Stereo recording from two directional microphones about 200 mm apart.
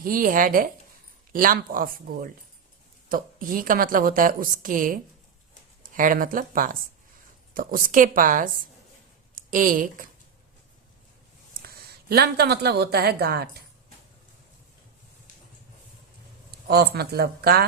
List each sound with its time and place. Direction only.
0.0 s a woman's voice: 45° right (ahead or behind)
11.6 s speech: 50° right (ahead or behind)
16.5 s speech: 50° right (ahead or behind)